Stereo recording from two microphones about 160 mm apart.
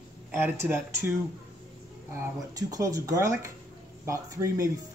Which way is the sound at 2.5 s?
20° right (ahead or behind).